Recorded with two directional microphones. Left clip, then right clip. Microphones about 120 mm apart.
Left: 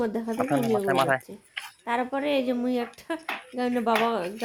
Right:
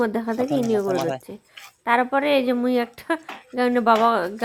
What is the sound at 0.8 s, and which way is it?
Speech, 10° right (ahead or behind).